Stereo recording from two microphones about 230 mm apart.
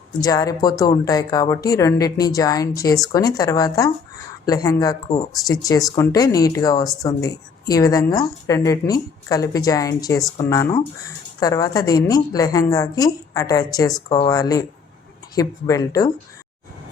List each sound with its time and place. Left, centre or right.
0.2 s speech: centre